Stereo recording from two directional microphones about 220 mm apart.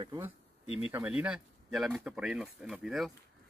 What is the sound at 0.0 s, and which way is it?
Speech, 15° right (ahead or behind).